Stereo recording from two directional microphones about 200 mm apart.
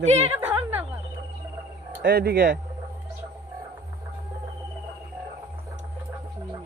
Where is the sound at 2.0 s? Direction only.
50° right (ahead or behind).